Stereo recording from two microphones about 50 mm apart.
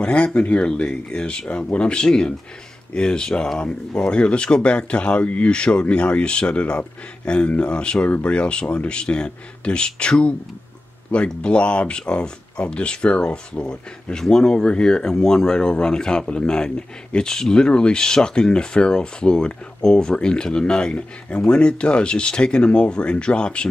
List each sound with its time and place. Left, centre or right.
0.0 s speech: left